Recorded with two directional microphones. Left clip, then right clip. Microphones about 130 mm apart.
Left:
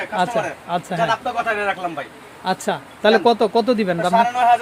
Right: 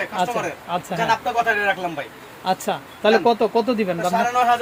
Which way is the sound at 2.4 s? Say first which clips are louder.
Left 1 dB; 25° left (ahead or behind).